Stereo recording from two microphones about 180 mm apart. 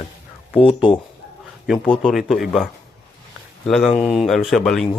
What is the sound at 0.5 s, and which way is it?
Speech, 30° left (ahead or behind).